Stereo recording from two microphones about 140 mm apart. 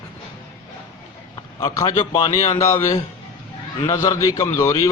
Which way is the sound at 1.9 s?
30° left (ahead or behind).